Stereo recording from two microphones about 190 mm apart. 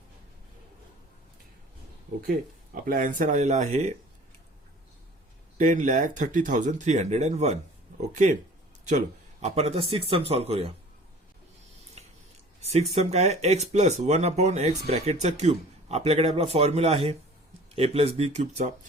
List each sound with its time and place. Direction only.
2.8 s speech: 45° right (ahead or behind)
5.5 s speech: 45° right (ahead or behind)
9.4 s speech: 35° right (ahead or behind)
12.0 s scissors: 35° right (ahead or behind)
12.6 s speech: 35° right (ahead or behind)